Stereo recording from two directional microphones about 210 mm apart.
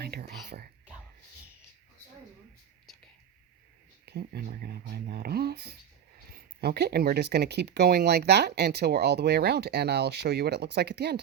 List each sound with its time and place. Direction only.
0.0 s speech: 50° right (ahead or behind)
4.0 s speech: 50° right (ahead or behind)